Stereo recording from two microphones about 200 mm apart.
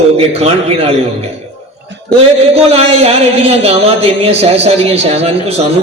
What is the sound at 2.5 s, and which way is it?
Speech, 30° right (ahead or behind).